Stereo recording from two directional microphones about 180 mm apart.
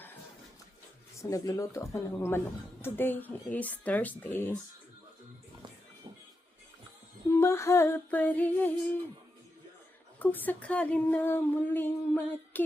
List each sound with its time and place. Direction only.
1.2 s speech: 20° left (ahead or behind)
7.3 s speech: 15° left (ahead or behind)
10.2 s speech: 10° left (ahead or behind)